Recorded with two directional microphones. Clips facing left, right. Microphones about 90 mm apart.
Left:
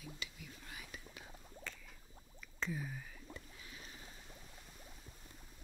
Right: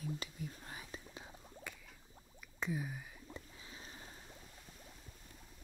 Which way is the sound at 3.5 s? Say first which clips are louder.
Right 1 dB; 30° right (ahead or behind).